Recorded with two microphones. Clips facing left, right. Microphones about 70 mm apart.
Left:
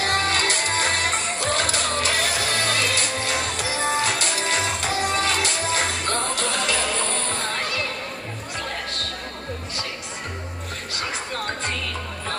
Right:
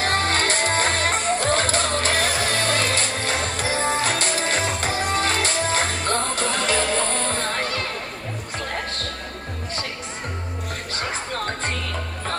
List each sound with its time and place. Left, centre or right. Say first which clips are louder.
0.0 s music: right 1 dB; right